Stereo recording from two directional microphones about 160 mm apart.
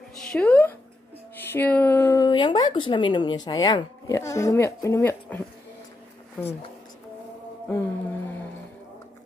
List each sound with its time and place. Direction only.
0.3 s speech: 10° left (ahead or behind)
1.3 s music: 15° left (ahead or behind)
2.2 s speech: 25° left (ahead or behind)
7.6 s music: 10° left (ahead or behind)